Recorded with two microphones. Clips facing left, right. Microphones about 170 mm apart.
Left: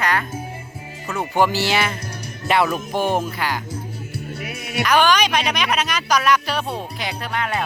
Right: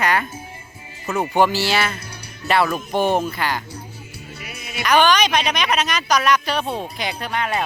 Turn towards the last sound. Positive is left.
turn(degrees=0)  # may be behind; listen again after turning